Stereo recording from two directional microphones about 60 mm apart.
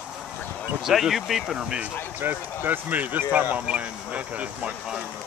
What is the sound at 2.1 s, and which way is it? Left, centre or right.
Speech, right.